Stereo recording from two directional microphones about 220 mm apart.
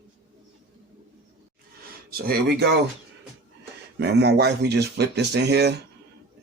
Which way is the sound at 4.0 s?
50° right (ahead or behind).